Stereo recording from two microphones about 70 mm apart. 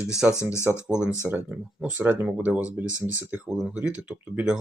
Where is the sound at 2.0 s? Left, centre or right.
Right.